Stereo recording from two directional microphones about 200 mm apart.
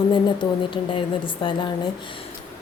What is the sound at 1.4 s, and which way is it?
Speech, 25° left (ahead or behind).